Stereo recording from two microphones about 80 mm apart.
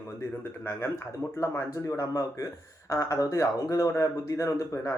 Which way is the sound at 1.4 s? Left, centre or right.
Left.